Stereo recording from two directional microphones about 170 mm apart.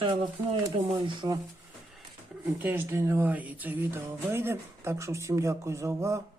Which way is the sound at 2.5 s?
10° right (ahead or behind).